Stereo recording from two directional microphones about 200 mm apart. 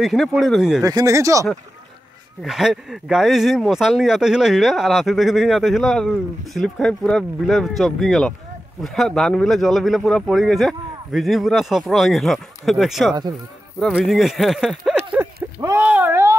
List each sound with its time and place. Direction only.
0.0 s speech: centre (ahead or behind)
0.8 s speech: 15° right (ahead or behind)
2.4 s speech: centre (ahead or behind)
14.9 s a sound: 5° right (ahead or behind)
15.6 s speech: 10° right (ahead or behind)